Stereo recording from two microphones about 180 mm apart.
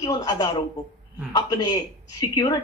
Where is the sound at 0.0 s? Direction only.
20° left (ahead or behind).